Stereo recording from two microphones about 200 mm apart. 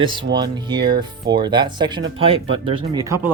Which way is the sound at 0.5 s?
25° right (ahead or behind).